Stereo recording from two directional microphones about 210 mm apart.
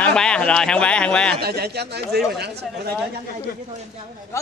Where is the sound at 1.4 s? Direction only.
50° right (ahead or behind).